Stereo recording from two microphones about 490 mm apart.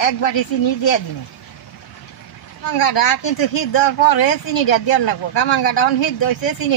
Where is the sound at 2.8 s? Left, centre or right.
Left.